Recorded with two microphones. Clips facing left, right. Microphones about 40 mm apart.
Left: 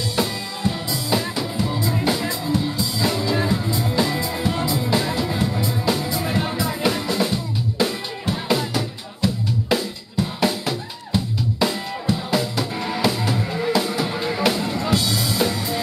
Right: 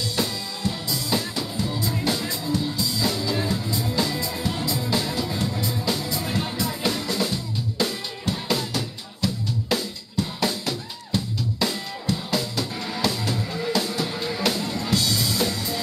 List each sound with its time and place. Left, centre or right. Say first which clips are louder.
0.1 s music: left 3 dB; centre
7.8 s drum: left 3 dB; centre
13.4 s music: left 4 dB; centre